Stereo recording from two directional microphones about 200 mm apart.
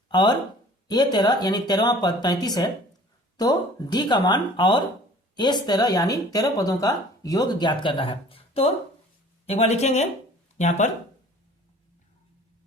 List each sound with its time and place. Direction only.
0.1 s speech: 20° left (ahead or behind); by 10.9 s 35° left (ahead or behind)